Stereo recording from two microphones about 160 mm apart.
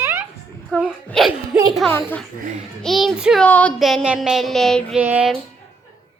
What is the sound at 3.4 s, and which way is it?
Speech, 10° left (ahead or behind).